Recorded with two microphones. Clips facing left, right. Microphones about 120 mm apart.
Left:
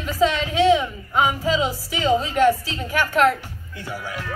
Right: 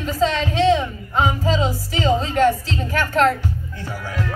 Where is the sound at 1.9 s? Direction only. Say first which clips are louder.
Right 1 dB; 40° right (ahead or behind).